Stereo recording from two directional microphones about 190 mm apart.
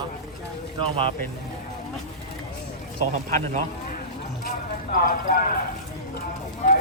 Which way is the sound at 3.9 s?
50° left (ahead or behind).